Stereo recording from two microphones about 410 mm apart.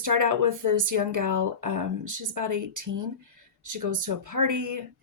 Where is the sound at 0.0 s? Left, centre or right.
Right.